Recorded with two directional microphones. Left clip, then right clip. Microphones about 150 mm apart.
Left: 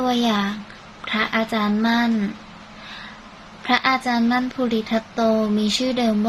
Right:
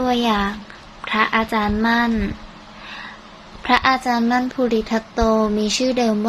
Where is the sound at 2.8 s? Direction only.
20° right (ahead or behind).